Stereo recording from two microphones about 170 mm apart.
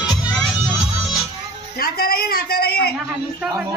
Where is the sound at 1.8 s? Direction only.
65° left (ahead or behind).